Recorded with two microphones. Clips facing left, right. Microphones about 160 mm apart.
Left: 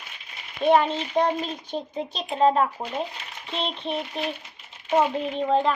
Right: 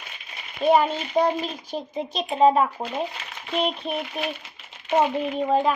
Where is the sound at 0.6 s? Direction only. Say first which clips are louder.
Even; 5° right (ahead or behind).